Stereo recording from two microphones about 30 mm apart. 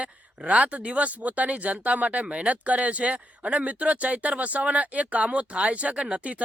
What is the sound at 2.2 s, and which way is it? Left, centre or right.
Speech, right.